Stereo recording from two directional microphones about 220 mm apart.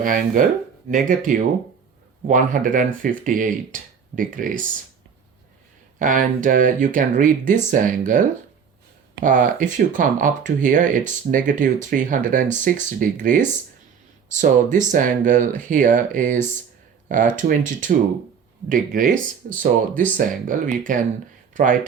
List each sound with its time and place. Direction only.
0.0 s speech: 40° right (ahead or behind)
6.0 s speech: 35° right (ahead or behind)
19.9 s speech: 5° left (ahead or behind)
20.1 s speech: 40° right (ahead or behind)